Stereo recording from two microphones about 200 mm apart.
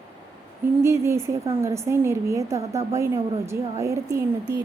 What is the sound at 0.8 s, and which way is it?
A woman's voice, 15° right (ahead or behind).